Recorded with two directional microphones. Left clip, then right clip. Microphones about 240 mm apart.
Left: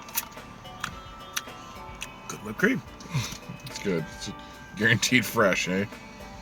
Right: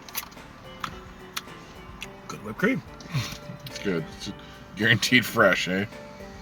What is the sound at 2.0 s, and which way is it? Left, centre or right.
Music, centre.